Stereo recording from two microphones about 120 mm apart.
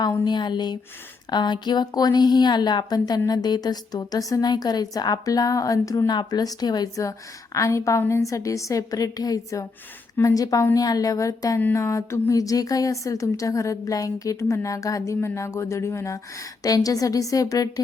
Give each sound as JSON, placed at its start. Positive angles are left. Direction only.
{"t": 0.3, "sound": "a woman's voice", "side_deg": 40}